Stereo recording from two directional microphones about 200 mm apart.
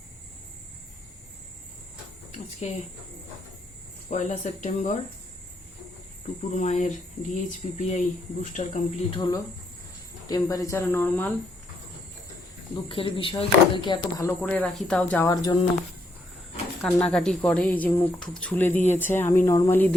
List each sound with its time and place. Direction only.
2.6 s speech: 35° left (ahead or behind)
4.1 s speech: 35° left (ahead or behind)
6.5 s speech: 35° left (ahead or behind)
9.1 s speech: 20° left (ahead or behind)
12.7 s speech: 25° left (ahead or behind)
14.3 s speech: 5° left (ahead or behind)
16.8 s speech: 5° left (ahead or behind)